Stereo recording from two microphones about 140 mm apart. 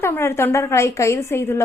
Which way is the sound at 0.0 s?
15° left (ahead or behind).